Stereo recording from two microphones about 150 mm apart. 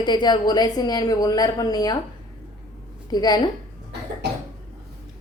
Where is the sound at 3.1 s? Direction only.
25° left (ahead or behind).